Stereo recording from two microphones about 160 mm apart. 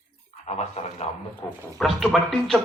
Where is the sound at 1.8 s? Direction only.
5° left (ahead or behind).